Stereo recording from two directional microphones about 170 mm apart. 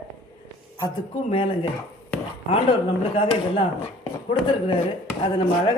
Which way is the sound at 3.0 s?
30° left (ahead or behind).